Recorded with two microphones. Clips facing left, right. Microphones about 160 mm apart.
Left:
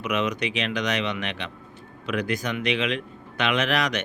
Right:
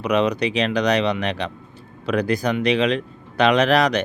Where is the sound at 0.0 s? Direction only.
35° right (ahead or behind).